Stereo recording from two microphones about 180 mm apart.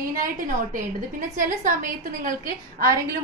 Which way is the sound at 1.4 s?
45° right (ahead or behind).